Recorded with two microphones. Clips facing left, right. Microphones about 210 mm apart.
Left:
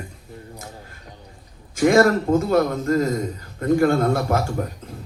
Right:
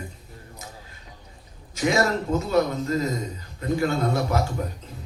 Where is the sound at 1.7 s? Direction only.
55° left (ahead or behind).